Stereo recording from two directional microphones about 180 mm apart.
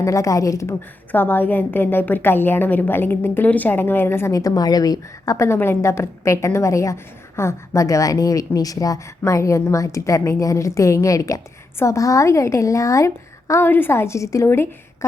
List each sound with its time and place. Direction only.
0.0 s a woman's voice: 15° left (ahead or behind)